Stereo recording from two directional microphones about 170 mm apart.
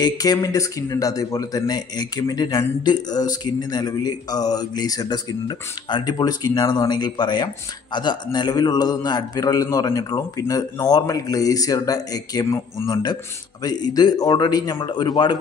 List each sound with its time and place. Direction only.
0.0 s speech: 20° left (ahead or behind)